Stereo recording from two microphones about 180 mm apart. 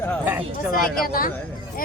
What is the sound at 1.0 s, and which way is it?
Speech, 50° left (ahead or behind).